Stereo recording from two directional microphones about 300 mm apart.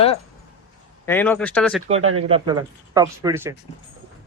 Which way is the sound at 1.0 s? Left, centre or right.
Centre.